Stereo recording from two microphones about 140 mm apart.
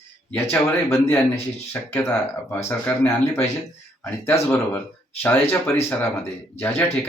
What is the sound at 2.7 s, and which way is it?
Speech, 15° left (ahead or behind).